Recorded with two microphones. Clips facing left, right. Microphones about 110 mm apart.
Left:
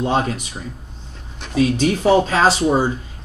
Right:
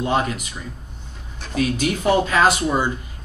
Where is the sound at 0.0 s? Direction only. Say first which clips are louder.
Left 2 dB; 30° left (ahead or behind).